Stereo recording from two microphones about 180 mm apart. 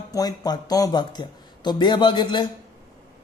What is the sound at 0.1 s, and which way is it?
Speech, 20° left (ahead or behind).